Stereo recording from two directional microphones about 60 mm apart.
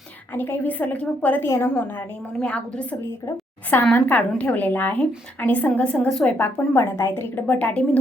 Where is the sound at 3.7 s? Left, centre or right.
Left; by 6.3 s centre.